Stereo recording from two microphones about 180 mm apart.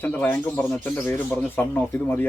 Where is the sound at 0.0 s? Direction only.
10° left (ahead or behind).